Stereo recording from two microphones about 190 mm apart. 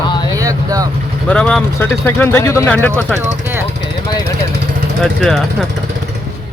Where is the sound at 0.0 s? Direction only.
20° left (ahead or behind).